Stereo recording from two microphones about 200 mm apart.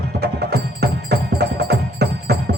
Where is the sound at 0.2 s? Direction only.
55° right (ahead or behind).